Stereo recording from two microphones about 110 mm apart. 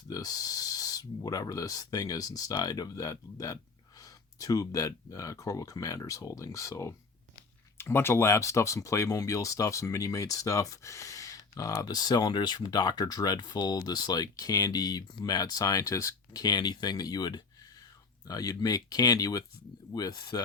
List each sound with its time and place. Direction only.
0.1 s speech: 35° left (ahead or behind)